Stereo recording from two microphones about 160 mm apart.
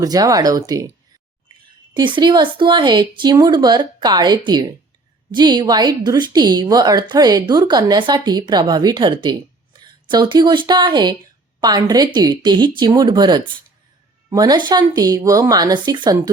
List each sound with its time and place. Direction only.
0.0 s speech: 20° right (ahead or behind)